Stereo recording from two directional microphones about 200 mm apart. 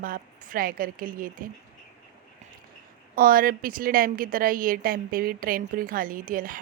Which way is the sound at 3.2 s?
45° right (ahead or behind).